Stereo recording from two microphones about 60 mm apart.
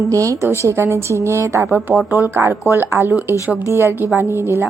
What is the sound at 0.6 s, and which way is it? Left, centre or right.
A woman's voice, right.